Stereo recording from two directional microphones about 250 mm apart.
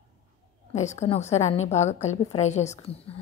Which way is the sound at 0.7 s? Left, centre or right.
Left.